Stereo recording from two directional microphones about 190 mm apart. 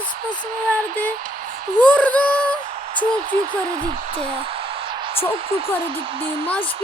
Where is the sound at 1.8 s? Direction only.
5° left (ahead or behind).